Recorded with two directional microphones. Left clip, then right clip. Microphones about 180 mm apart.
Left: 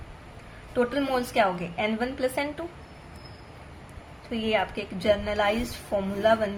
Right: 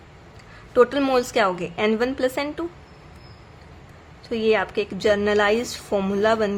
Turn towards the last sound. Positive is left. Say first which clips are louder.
# right 3 dB
turn(degrees=-45)  # may be behind; listen again after turning